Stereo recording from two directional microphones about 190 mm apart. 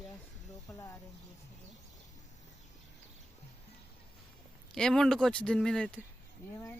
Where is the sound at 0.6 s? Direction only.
15° left (ahead or behind).